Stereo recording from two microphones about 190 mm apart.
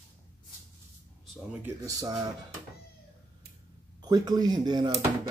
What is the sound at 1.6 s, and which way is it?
Speech, 15° right (ahead or behind).